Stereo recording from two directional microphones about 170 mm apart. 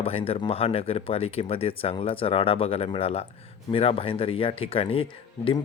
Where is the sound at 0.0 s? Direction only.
35° left (ahead or behind).